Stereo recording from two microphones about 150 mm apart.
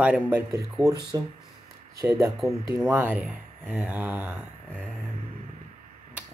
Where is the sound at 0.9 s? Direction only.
25° right (ahead or behind).